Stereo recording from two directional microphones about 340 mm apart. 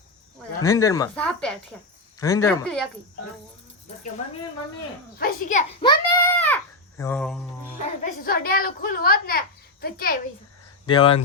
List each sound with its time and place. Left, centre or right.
0.6 s speech: centre
5.2 s a child's voice: left; by 7.8 s centre
7.8 s a woman's voice: left
10.8 s speech: centre